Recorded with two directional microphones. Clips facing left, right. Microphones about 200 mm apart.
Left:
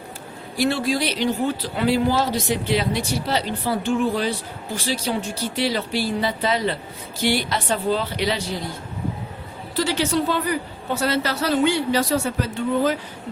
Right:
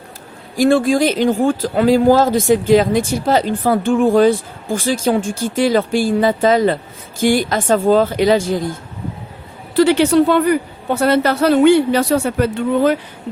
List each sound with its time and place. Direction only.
0.5 s speech: 45° right (ahead or behind)
9.7 s a woman's voice: 60° right (ahead or behind)